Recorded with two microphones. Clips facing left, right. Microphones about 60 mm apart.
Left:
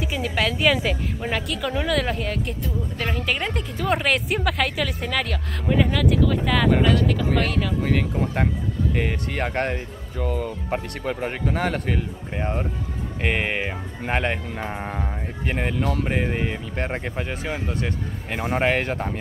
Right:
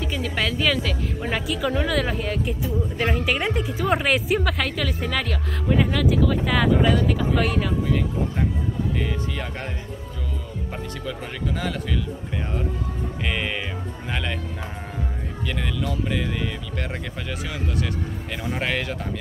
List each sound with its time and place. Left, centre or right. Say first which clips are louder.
0.0 s speech: left 2 dB; centre
1.3 s speech: right 2 dB; centre
7.8 s speech: left 1 dB; left
13.2 s speech: left 4 dB; left
16.2 s speech: left 3 dB; left